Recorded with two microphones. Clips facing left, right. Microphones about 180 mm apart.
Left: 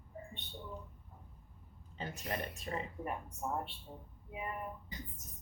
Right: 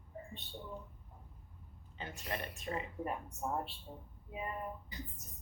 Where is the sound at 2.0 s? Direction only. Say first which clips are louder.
Left 2 dB; 40° left (ahead or behind).